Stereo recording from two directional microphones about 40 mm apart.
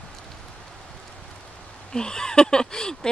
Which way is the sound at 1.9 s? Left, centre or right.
Centre.